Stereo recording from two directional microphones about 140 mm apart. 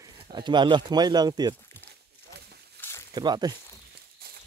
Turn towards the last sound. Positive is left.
turn(degrees=-30)  # may be behind; listen again after turning